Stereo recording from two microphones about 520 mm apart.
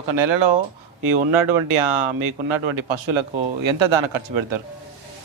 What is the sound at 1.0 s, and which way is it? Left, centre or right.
Speech, right.